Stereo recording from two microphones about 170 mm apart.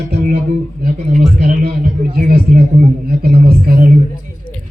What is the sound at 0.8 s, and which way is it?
A man's voice, 55° right (ahead or behind).